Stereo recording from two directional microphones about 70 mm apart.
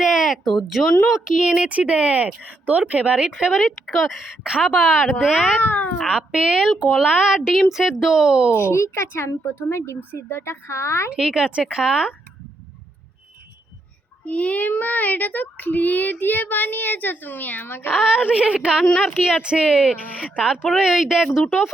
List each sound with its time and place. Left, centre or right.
0.0 s a sound: centre
1.2 s speech: centre
3.0 s speech: centre
3.6 s speech: centre
5.5 s a child's voice: left
6.1 s speech: centre
8.5 s a woman's voice: left
11.2 s speech: centre
14.3 s a child's voice: centre
17.9 s speech: centre
18.9 s speech: centre